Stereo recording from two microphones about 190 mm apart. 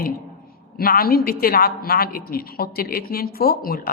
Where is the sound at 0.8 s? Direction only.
50° left (ahead or behind).